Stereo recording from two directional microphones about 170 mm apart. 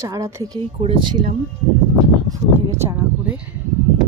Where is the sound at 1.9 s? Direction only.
20° right (ahead or behind).